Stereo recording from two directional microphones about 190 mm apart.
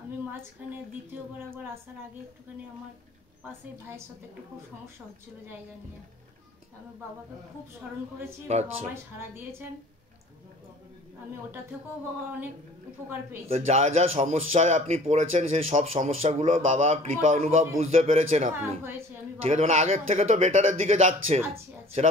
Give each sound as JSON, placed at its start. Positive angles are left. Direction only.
{"t": 0.6, "sound": "a woman's voice", "side_deg": -10}
{"t": 8.5, "sound": "speech", "side_deg": -35}
{"t": 8.9, "sound": "a woman's voice", "side_deg": -15}
{"t": 13.5, "sound": "speech", "side_deg": -35}
{"t": 18.5, "sound": "a woman's voice", "side_deg": -15}
{"t": 19.4, "sound": "speech", "side_deg": -35}